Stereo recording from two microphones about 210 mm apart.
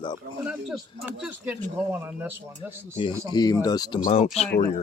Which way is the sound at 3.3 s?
20° left (ahead or behind).